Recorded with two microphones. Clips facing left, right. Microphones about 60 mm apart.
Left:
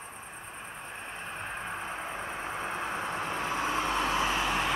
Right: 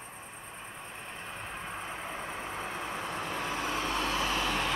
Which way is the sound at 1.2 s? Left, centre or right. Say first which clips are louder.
Left 3 dB; left.